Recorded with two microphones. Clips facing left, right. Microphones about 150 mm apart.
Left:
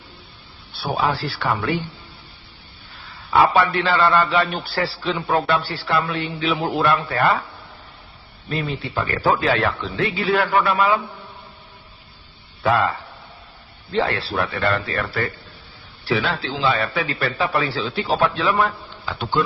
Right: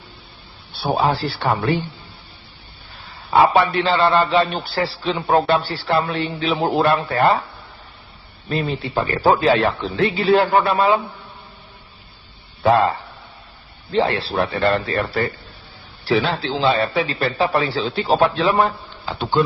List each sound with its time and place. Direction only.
0.8 s a man's voice: 25° right (ahead or behind)
3.2 s a man's voice: 25° right (ahead or behind)
9.0 s a man's voice: 25° right (ahead or behind)
12.6 s a man's voice: 30° right (ahead or behind)